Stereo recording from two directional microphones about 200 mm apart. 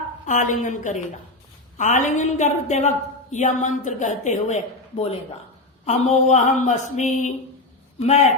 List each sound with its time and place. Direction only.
0.3 s a woman's voice: 40° left (ahead or behind)